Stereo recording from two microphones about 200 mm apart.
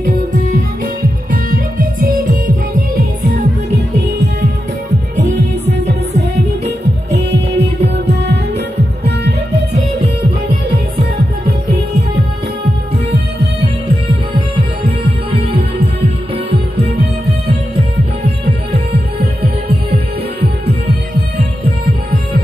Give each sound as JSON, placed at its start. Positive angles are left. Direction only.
{"t": 0.0, "sound": "music", "side_deg": -50}
{"t": 5.1, "sound": "music", "side_deg": -35}
{"t": 7.2, "sound": "music", "side_deg": -60}
{"t": 18.4, "sound": "music", "side_deg": -55}